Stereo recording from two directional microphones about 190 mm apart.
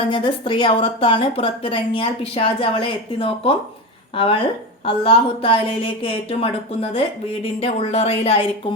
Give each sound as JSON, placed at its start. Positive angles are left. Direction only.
{"t": 0.1, "sound": "speech", "side_deg": 25}